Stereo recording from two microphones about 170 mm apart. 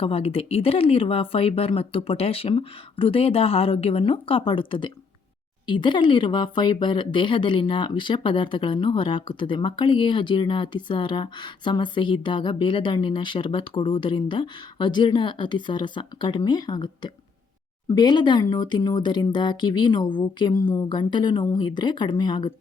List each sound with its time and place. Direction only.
0.0 s speech: 35° left (ahead or behind)